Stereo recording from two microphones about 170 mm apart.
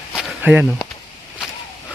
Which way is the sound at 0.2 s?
5° right (ahead or behind).